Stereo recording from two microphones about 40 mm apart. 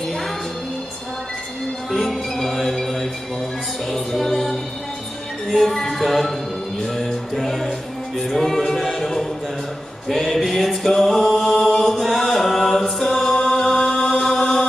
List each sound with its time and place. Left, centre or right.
1.9 s music: centre
8.2 s a capella: centre
10.0 s a sound: centre
11.4 s a capella: centre
11.9 s chant: centre
13.0 s choir: centre
13.5 s chant: centre